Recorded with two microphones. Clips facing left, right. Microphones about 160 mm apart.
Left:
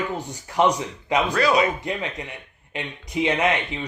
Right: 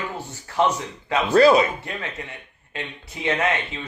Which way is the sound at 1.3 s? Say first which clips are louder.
Right 8 dB; 30° right (ahead or behind).